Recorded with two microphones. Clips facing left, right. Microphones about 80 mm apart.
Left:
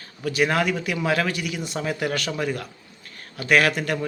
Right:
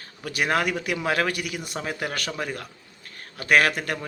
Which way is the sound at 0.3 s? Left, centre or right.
Right.